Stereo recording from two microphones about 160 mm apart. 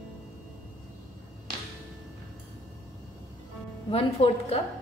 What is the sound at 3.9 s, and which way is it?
Speech, 40° left (ahead or behind).